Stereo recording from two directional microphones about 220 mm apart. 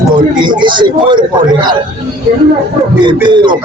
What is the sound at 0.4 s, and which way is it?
Speech, 20° right (ahead or behind).